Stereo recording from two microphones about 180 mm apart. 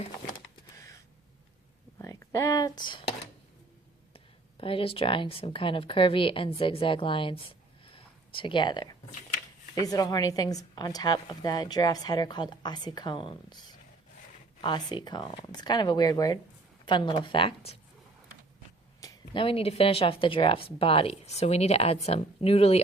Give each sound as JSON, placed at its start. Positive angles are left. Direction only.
{"t": 0.8, "sound": "gasp", "side_deg": 15}
{"t": 2.0, "sound": "a sound", "side_deg": 15}
{"t": 4.1, "sound": "a woman's voice", "side_deg": 30}
{"t": 7.9, "sound": "a sound", "side_deg": 30}
{"t": 9.8, "sound": "a woman's voice", "side_deg": 20}
{"t": 18.9, "sound": "speech", "side_deg": 25}